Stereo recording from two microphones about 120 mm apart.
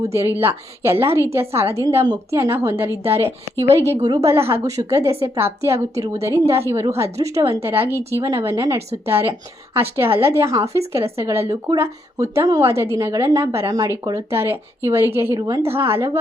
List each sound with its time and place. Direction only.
0.0 s a woman's voice: 25° right (ahead or behind)